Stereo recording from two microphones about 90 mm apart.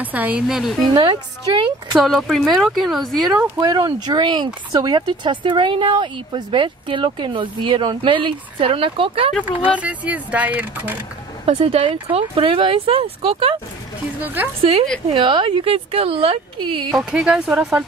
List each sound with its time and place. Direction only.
0.0 s speech: 20° right (ahead or behind)
0.5 s speech: 5° right (ahead or behind)
0.9 s speech: 70° right (ahead or behind)
2.0 s speech: centre (ahead or behind)
3.5 s speech: 55° right (ahead or behind); by 9.3 s 85° right
9.8 s speech: 15° right (ahead or behind)
11.4 s speech: 90° right
14.2 s speech: 20° right (ahead or behind)
14.6 s speech: 90° right
15.1 s speech: 70° right (ahead or behind)
16.9 s speech: 5° right (ahead or behind)